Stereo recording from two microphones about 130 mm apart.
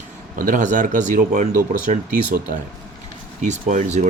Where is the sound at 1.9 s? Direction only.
90° right.